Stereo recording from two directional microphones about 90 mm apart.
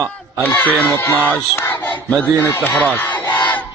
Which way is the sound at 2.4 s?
25° left (ahead or behind).